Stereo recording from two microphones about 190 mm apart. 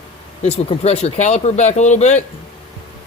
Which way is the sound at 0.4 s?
35° left (ahead or behind).